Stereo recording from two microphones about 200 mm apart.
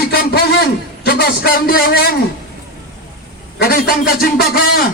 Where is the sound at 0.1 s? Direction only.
50° left (ahead or behind).